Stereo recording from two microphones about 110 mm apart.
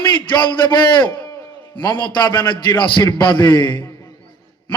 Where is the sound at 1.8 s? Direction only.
45° left (ahead or behind).